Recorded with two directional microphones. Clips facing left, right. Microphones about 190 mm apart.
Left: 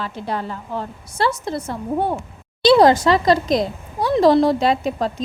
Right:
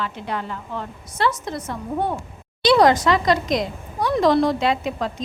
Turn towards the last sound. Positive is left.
turn(degrees=35)  # may be behind; listen again after turning